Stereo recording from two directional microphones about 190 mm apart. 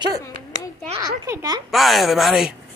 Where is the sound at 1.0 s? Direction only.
15° right (ahead or behind).